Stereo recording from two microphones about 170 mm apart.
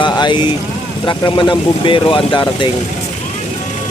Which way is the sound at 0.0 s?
25° left (ahead or behind).